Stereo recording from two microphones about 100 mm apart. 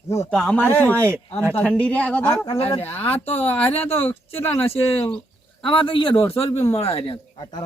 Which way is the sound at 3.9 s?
85° left.